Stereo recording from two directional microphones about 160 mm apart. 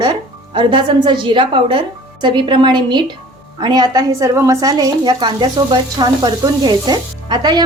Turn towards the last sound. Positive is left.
turn(degrees=-25)  # may be behind; listen again after turning